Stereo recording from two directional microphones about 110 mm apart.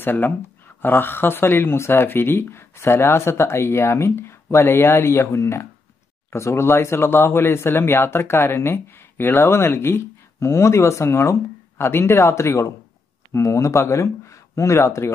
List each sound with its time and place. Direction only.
0.0 s speech: 20° left (ahead or behind)